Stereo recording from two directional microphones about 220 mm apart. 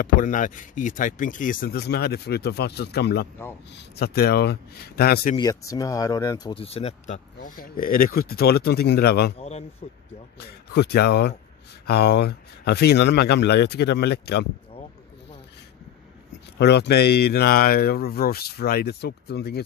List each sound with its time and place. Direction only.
0.0 s speech: 35° left (ahead or behind)
5.3 s speech: 20° left (ahead or behind); by 9.3 s 45° left (ahead or behind)
9.4 s speech: 30° left (ahead or behind)
10.7 s speech: 50° left (ahead or behind)
16.5 s speech: 50° left (ahead or behind)